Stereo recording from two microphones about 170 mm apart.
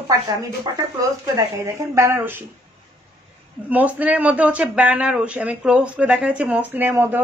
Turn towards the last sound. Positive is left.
turn(degrees=-10)  # may be behind; listen again after turning